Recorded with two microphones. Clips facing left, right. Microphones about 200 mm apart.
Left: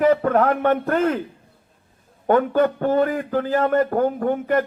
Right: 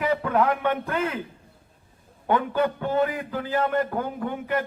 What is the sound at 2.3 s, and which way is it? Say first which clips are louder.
A man's voice: left 6 dB; 45° left (ahead or behind).